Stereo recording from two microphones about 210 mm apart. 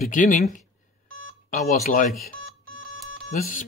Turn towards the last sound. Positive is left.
turn(degrees=40)  # may be behind; listen again after turning